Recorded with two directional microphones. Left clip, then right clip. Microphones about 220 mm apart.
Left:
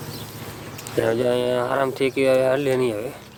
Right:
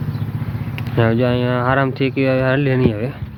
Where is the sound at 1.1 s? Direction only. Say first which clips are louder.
Right 1 dB; 15° left (ahead or behind).